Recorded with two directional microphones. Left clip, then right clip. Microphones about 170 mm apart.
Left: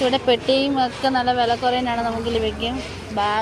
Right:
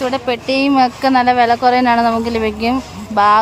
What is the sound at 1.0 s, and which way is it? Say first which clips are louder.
Speech: right 6 dB; 35° right (ahead or behind).